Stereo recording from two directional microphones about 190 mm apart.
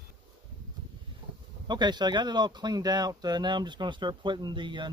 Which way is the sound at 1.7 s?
25° right (ahead or behind).